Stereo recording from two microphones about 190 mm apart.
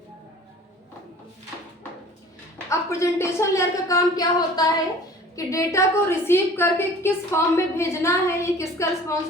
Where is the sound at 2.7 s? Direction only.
15° left (ahead or behind).